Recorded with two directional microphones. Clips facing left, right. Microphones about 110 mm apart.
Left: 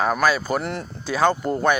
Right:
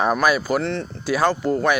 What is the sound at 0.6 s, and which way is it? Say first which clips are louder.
Speech: right 3 dB; 10° left (ahead or behind).